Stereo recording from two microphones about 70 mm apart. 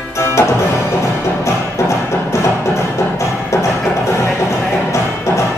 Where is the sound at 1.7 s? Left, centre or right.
Left.